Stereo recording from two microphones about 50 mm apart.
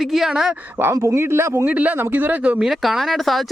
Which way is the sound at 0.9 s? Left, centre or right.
Right.